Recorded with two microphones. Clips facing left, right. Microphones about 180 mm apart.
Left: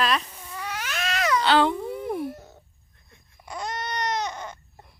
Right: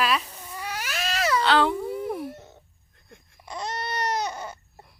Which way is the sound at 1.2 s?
30° right (ahead or behind).